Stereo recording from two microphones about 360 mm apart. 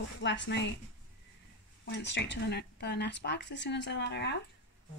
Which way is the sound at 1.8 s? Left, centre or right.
Left.